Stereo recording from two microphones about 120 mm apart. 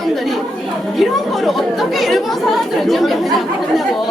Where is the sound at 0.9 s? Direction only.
Centre (ahead or behind).